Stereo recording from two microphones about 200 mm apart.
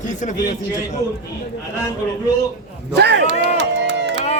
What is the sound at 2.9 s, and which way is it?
Speech, 60° right (ahead or behind).